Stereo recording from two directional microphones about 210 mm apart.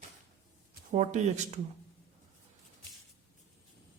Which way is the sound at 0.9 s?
35° right (ahead or behind).